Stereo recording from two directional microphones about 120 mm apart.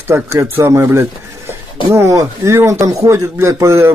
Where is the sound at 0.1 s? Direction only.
20° right (ahead or behind).